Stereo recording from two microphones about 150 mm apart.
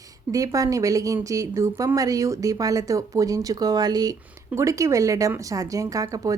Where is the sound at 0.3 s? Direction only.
20° right (ahead or behind).